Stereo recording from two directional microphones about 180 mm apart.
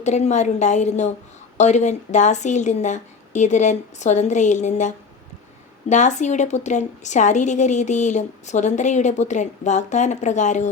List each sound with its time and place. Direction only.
0.0 s a woman's voice: 40° left (ahead or behind)